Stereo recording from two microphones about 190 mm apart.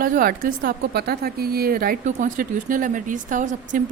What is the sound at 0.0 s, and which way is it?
A woman's voice, 50° right (ahead or behind).